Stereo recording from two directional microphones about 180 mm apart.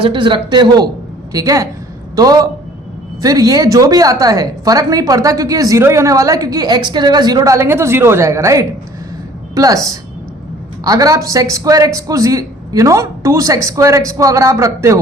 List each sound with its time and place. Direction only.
0.0 s a woman's voice: 25° right (ahead or behind)